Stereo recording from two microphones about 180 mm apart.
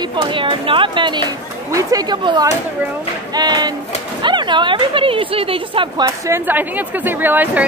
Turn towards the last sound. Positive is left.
turn(degrees=-10)  # may be behind; listen again after turning